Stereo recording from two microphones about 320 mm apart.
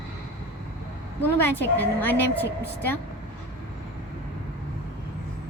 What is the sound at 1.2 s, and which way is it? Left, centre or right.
A woman's voice, centre.